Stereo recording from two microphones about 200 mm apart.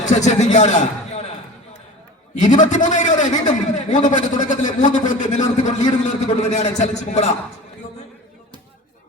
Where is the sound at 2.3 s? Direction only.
35° left (ahead or behind).